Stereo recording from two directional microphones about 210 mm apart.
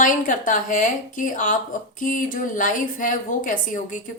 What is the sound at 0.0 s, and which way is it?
Speech, 40° left (ahead or behind).